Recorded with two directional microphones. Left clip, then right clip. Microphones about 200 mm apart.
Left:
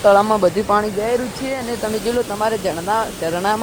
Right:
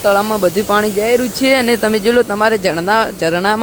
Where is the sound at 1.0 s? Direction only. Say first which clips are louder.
Right 7 dB; 50° right (ahead or behind).